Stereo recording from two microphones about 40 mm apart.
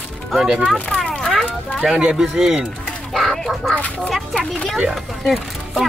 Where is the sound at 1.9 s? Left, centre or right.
Right.